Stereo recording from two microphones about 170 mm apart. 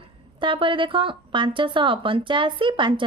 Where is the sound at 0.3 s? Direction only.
30° right (ahead or behind).